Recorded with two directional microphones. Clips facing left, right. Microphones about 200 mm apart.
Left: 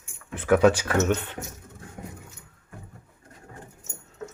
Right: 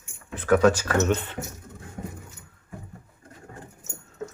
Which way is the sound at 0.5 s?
15° left (ahead or behind).